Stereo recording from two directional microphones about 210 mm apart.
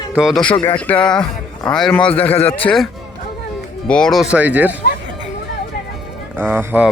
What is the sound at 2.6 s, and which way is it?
Speech, centre (ahead or behind).